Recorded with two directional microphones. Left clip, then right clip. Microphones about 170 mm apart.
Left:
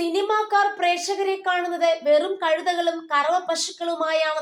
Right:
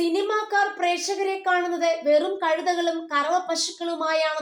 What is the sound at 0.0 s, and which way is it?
Speech, 25° left (ahead or behind).